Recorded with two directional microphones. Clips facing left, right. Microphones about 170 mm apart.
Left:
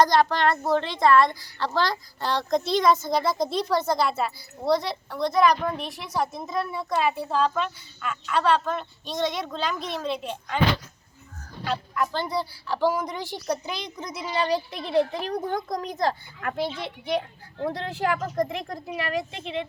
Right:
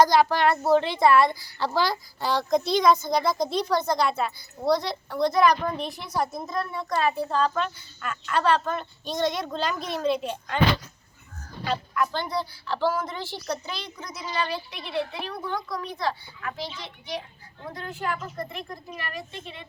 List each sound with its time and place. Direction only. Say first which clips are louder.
0.0 s a woman's voice: right 1 dB; 5° right (ahead or behind)
12.3 s speech: left 1 dB; 10° left (ahead or behind); by 18.2 s 75° left (ahead or behind)
18.4 s speech: left 5 dB; 90° left